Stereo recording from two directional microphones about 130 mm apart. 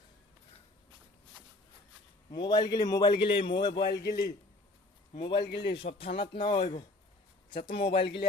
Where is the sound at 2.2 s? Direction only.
35° left (ahead or behind).